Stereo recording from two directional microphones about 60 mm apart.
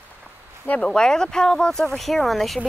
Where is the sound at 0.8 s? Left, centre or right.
Centre.